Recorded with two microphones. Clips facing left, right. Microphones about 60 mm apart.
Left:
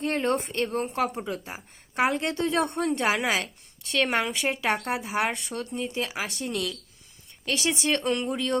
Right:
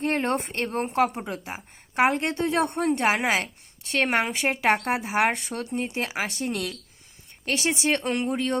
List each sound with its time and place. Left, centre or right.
0.0 s a woman's voice: right
6.1 s a woman's voice: right
7.9 s speech: right